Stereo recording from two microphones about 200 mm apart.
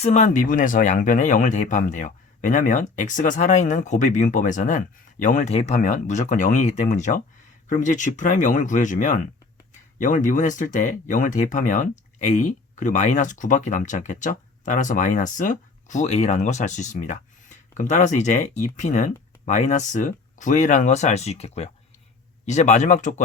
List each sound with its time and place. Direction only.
0.0 s speech: 35° left (ahead or behind)